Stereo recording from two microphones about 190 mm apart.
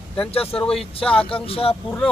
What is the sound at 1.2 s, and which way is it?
Speech, 30° left (ahead or behind).